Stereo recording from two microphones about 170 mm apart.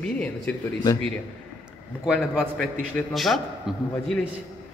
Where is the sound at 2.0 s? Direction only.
5° right (ahead or behind).